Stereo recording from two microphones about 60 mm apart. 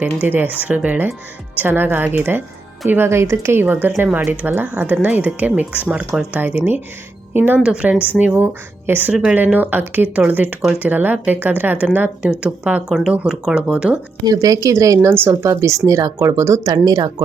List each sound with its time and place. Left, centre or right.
0.0 s speech: right
3.1 s speech: right
7.6 s speech: centre
12.3 s speech: centre
14.3 s a woman's voice: right
14.9 s speech: right
15.4 s speech: right
16.1 s speech: right
16.6 s speech: right